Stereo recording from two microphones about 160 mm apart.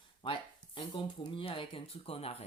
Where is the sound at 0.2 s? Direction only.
35° left (ahead or behind).